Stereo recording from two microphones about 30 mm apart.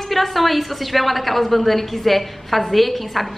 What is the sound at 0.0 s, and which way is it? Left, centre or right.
A woman's voice, centre.